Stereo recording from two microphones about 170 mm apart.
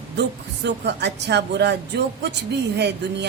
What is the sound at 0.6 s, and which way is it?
A woman's voice, 85° right.